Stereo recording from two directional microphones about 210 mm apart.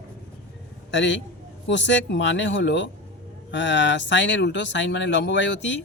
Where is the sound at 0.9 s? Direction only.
60° left (ahead or behind).